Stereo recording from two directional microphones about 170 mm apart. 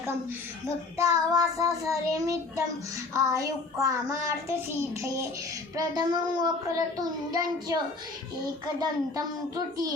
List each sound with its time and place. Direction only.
0.9 s a child's voice: 20° right (ahead or behind)
5.7 s a child's voice: 25° right (ahead or behind)